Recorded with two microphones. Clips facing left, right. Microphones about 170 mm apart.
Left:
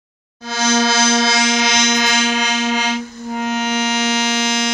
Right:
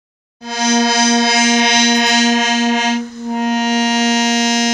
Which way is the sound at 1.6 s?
60° right (ahead or behind).